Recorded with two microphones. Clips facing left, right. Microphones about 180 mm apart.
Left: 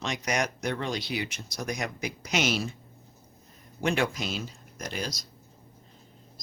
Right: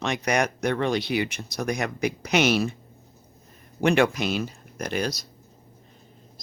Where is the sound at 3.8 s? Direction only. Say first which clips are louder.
Right 7 dB; 65° right (ahead or behind).